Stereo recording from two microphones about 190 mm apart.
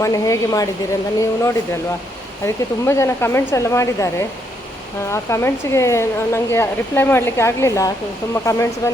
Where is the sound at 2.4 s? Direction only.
15° left (ahead or behind).